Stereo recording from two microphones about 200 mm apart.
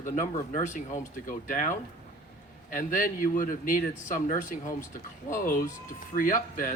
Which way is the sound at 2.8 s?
40° left (ahead or behind).